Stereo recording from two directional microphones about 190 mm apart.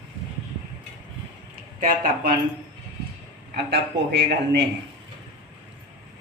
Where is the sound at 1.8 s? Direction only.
50° right (ahead or behind).